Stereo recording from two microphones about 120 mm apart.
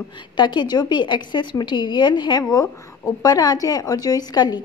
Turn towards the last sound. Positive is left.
turn(degrees=35)  # may be behind; listen again after turning